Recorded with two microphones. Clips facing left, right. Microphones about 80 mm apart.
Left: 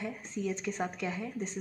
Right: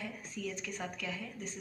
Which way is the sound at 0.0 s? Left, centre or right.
Left.